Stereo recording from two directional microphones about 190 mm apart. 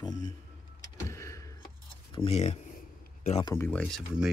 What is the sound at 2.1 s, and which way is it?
Speech, 35° left (ahead or behind).